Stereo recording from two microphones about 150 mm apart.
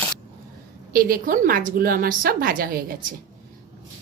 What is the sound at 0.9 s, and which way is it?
A woman's voice, 75° right (ahead or behind).